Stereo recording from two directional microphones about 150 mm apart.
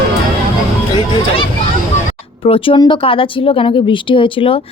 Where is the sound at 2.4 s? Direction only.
35° left (ahead or behind).